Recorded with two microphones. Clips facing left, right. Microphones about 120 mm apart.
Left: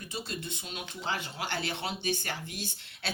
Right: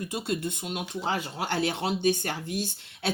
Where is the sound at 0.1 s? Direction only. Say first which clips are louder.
Right 5 dB; 55° right (ahead or behind).